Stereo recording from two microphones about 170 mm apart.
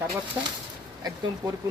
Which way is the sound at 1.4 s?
25° right (ahead or behind).